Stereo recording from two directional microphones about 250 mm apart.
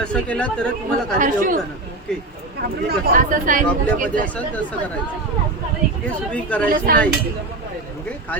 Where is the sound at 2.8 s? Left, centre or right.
Right.